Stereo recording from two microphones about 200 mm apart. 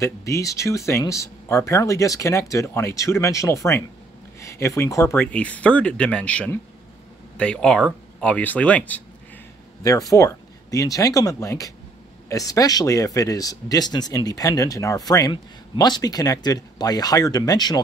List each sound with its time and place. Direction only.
0.0 s speech: 15° left (ahead or behind)
9.8 s speech: 15° left (ahead or behind)